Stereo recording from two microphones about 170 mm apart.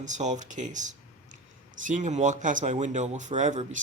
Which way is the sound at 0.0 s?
45° right (ahead or behind).